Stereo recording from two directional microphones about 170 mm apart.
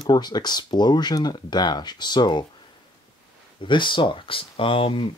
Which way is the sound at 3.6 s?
30° left (ahead or behind).